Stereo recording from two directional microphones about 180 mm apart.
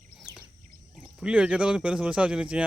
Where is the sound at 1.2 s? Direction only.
5° right (ahead or behind).